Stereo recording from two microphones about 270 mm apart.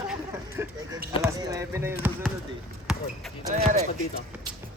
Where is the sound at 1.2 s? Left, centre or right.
Centre.